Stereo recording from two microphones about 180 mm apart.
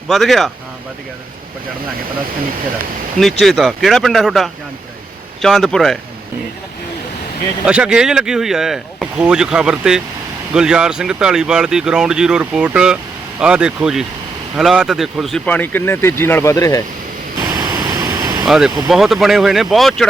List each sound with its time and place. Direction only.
0.1 s speech: centre (ahead or behind)
3.4 s speech: centre (ahead or behind)
7.6 s speech: 5° right (ahead or behind); by 16.8 s 20° left (ahead or behind)
17.4 s a sound: 20° right (ahead or behind)
18.4 s speech: 5° right (ahead or behind)